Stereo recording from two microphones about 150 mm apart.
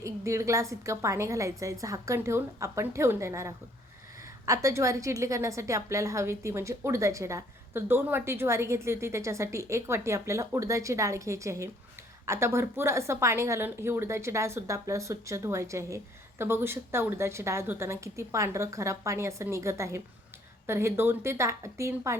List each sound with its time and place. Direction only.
0.0 s a woman's voice: 20° right (ahead or behind)